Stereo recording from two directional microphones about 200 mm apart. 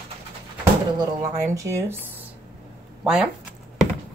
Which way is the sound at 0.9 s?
15° right (ahead or behind).